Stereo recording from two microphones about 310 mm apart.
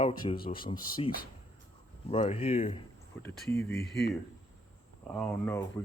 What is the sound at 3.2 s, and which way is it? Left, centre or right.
Speech, centre.